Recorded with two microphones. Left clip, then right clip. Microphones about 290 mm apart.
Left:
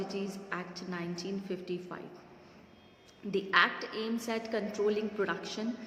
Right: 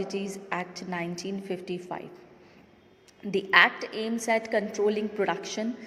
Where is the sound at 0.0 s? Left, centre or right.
Centre.